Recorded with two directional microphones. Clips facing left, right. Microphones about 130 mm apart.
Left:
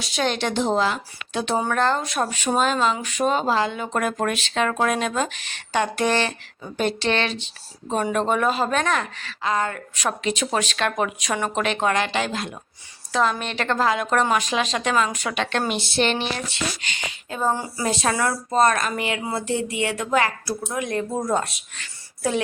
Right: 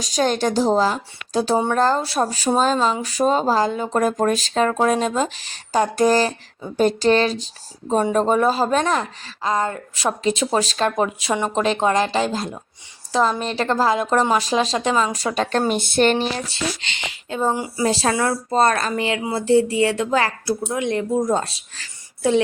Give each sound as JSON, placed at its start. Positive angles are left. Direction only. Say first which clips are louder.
{"t": 0.0, "sound": "speech", "louder": "right 4 dB", "side_deg": -40}
{"t": 7.9, "sound": "speech", "louder": "right 4 dB", "side_deg": -25}
{"t": 17.8, "sound": "speech", "louder": "right 3 dB", "side_deg": -30}